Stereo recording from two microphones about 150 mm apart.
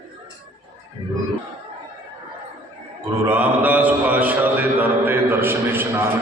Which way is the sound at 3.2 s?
10° right (ahead or behind).